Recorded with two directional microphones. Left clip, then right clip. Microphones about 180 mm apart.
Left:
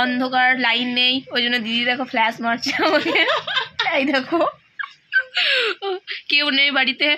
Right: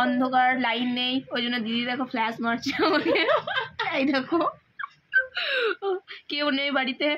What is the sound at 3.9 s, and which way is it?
Speech, 45° left (ahead or behind).